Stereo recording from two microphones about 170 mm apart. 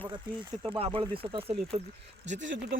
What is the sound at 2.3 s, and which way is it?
Speech, 90° right.